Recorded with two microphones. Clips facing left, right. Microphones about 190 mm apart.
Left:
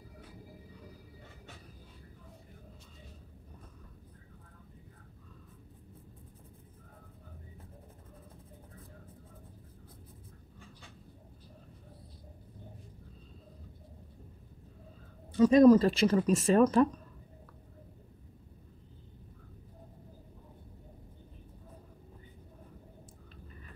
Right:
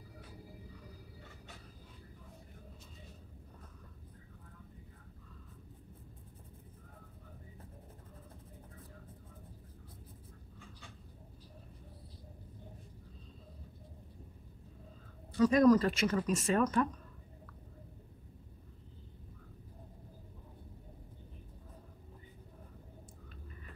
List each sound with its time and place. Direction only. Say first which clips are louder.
15.3 s speech: left 5 dB; 25° left (ahead or behind)